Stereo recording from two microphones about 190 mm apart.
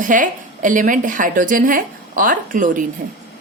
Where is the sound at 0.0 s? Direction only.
45° right (ahead or behind).